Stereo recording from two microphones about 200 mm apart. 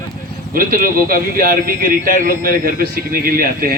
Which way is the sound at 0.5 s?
45° right (ahead or behind).